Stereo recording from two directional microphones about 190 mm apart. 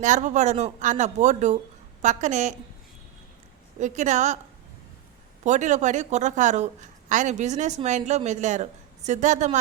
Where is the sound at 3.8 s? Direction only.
40° right (ahead or behind).